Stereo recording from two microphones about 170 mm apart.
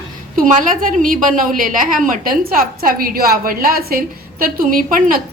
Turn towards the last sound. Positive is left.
turn(degrees=-55)  # may be behind; listen again after turning